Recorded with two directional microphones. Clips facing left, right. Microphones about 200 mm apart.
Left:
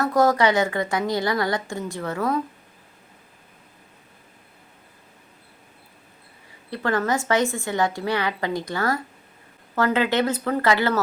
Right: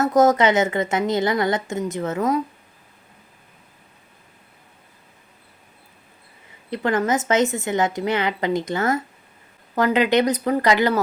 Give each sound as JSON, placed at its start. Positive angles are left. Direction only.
{"t": 0.0, "sound": "a woman's voice", "side_deg": -20}
{"t": 6.7, "sound": "a woman's voice", "side_deg": -20}